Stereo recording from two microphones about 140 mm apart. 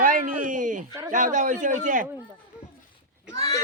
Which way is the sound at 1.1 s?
65° right (ahead or behind).